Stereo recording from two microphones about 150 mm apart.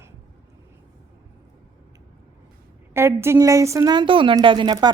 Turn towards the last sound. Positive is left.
turn(degrees=-30)  # may be behind; listen again after turning